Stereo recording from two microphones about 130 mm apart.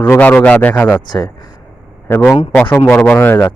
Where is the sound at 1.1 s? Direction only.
30° left (ahead or behind).